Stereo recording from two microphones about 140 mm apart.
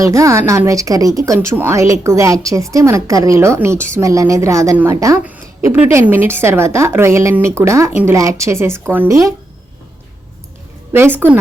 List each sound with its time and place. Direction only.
0.0 s speech: 20° right (ahead or behind)
5.2 s speech: 10° right (ahead or behind)
10.9 s a woman's voice: 15° right (ahead or behind)